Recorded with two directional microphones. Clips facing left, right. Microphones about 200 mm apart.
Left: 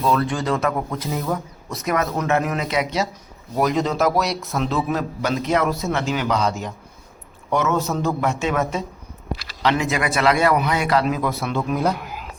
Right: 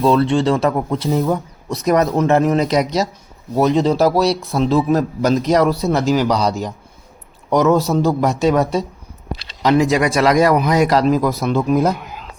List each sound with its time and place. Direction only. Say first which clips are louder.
0.0 s a man's voice: right 7 dB; 25° right (ahead or behind)
3.6 s a man's voice: right 5 dB; 30° right (ahead or behind)